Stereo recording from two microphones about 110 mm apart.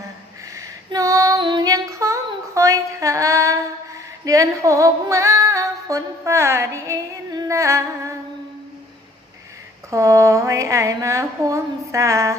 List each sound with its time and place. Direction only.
0.9 s female singing: 30° right (ahead or behind)
1.4 s female singing: 45° right (ahead or behind)
1.6 s female singing: 30° right (ahead or behind)
9.9 s a woman's voice: 30° right (ahead or behind)